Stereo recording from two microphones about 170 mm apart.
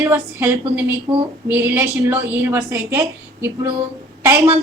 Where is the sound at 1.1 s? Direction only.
30° right (ahead or behind).